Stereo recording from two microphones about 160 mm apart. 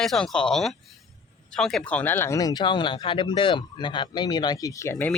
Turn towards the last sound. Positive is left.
turn(degrees=15)  # may be behind; listen again after turning